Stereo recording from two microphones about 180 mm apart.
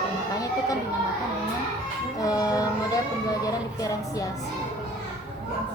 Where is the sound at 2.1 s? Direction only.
20° left (ahead or behind).